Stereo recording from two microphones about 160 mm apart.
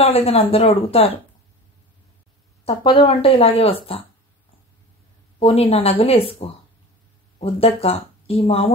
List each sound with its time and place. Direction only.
0.0 s speech: 40° left (ahead or behind)
2.6 s speech: 30° left (ahead or behind)
5.4 s speech: 40° left (ahead or behind)
7.3 s speech: 35° left (ahead or behind)